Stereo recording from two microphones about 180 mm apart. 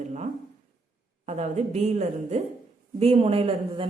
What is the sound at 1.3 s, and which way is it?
A woman's voice, 40° right (ahead or behind).